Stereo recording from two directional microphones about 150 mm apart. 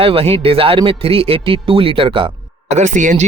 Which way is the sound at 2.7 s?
55° right (ahead or behind).